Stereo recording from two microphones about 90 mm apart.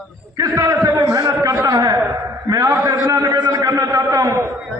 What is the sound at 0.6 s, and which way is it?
A man's voice, 40° right (ahead or behind).